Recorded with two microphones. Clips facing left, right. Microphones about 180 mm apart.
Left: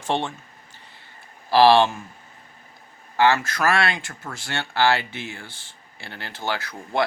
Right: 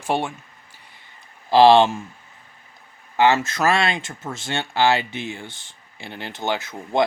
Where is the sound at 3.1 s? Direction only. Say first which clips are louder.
Right 2 dB; 20° right (ahead or behind).